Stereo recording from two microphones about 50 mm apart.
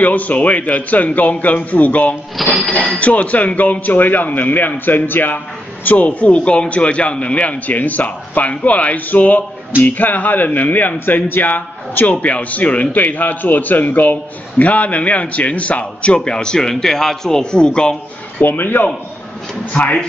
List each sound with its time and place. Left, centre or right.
0.0 s speech: left
2.4 s speech: centre
3.0 s speech: left
5.9 s a man's voice: left
18.4 s speech: left
19.7 s a man's voice: left